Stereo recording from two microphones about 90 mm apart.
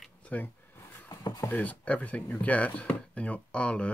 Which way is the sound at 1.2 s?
40° left (ahead or behind).